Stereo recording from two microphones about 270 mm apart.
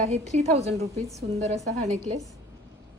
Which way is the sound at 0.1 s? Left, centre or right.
Right.